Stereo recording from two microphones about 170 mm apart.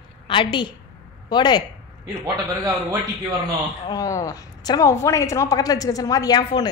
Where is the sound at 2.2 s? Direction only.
20° right (ahead or behind).